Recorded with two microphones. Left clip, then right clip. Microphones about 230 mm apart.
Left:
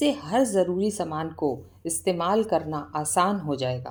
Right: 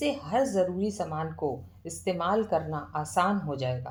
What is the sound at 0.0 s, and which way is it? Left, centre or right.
A woman's voice, left.